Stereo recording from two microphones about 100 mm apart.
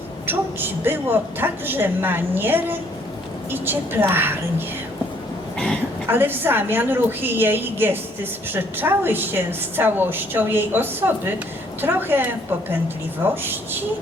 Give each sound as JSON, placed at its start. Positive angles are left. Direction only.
{"t": 0.3, "sound": "a woman's voice", "side_deg": -20}
{"t": 6.1, "sound": "a woman's voice", "side_deg": -20}